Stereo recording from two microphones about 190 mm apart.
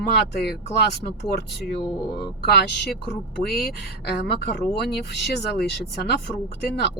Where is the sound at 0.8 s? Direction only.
60° left (ahead or behind).